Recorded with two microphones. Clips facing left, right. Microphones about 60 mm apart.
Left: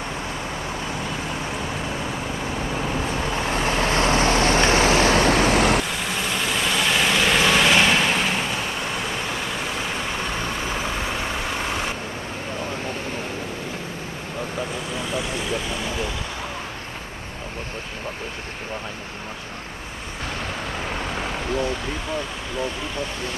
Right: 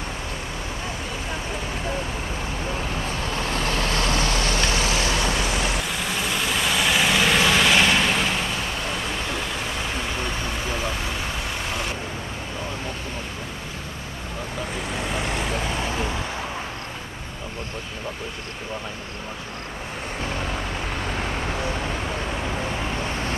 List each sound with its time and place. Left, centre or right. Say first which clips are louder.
3.2 s vehicle: left 2 dB; centre; by 5.8 s left
5.9 s vehicle: even; centre